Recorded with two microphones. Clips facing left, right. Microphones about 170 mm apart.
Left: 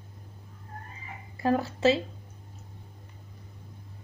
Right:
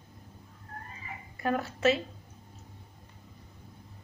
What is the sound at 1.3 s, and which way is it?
Speech, 30° left (ahead or behind).